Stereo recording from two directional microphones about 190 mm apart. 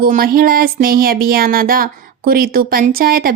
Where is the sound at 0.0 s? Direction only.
50° right (ahead or behind).